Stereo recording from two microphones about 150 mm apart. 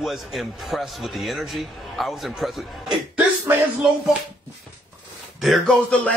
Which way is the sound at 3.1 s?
10° right (ahead or behind).